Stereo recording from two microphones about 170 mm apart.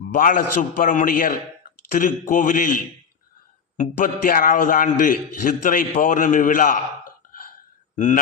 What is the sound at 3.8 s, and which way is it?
A man's voice, 50° left (ahead or behind).